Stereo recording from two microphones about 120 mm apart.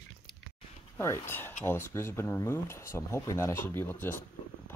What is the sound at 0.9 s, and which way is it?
Speech, 20° left (ahead or behind).